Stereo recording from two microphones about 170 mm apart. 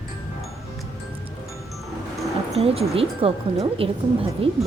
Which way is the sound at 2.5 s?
35° right (ahead or behind).